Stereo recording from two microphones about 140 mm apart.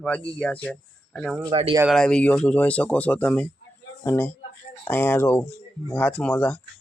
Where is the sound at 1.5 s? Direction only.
40° right (ahead or behind).